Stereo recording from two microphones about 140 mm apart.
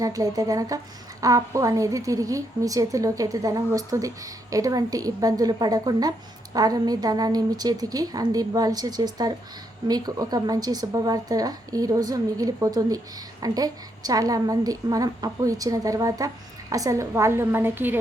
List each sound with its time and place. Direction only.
0.0 s a woman's voice: 25° right (ahead or behind)